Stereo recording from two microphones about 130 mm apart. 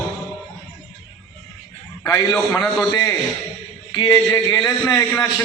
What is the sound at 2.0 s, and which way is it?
Speech, 25° left (ahead or behind).